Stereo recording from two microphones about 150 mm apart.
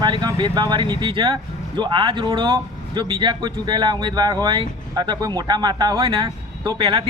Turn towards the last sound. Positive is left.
turn(degrees=-30)  # may be behind; listen again after turning